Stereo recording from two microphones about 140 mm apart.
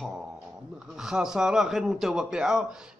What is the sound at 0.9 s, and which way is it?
A man's voice, 5° right (ahead or behind).